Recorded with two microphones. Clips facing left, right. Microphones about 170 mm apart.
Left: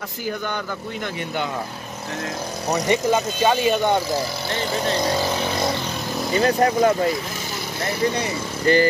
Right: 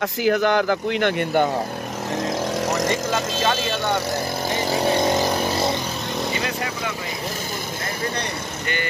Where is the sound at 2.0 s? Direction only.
90° right.